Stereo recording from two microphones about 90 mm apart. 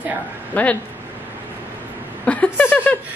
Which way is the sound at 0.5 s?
15° left (ahead or behind).